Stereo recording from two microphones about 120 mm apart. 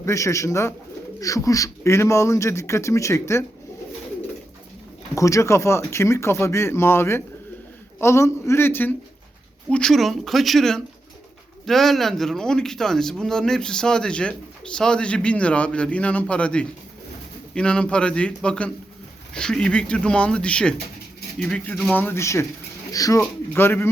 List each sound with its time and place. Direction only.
0.0 s speech: 25° left (ahead or behind)
5.1 s speech: 25° left (ahead or behind); by 21.9 s 5° left (ahead or behind)
21.9 s speech: 15° left (ahead or behind)
23.6 s speech: 20° left (ahead or behind)